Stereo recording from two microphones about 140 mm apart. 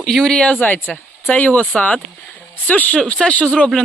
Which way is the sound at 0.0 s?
5° left (ahead or behind).